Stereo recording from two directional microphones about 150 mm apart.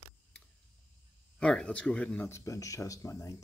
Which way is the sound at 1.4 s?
5° left (ahead or behind).